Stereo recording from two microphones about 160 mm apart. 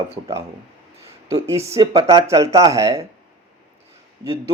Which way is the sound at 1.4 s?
20° right (ahead or behind).